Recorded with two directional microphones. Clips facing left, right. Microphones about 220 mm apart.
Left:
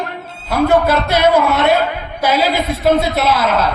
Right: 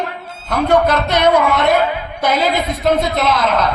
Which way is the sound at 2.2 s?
10° left (ahead or behind).